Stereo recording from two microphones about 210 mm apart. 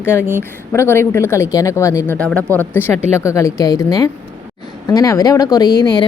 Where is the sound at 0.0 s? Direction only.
10° right (ahead or behind).